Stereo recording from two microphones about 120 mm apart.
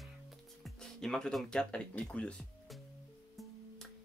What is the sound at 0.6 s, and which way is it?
Speech, 5° left (ahead or behind).